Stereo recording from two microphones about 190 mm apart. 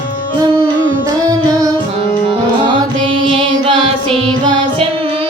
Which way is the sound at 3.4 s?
25° right (ahead or behind).